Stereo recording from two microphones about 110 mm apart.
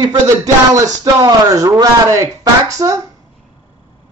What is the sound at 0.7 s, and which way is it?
Speech, 30° right (ahead or behind).